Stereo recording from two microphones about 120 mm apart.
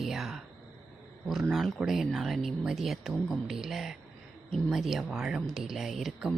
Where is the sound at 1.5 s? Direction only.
Centre (ahead or behind).